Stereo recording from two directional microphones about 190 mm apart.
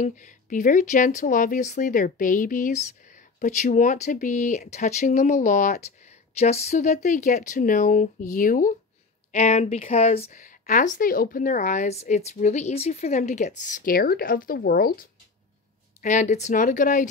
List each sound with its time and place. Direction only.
0.0 s a woman's voice: 40° left (ahead or behind)
16.0 s a woman's voice: 40° left (ahead or behind)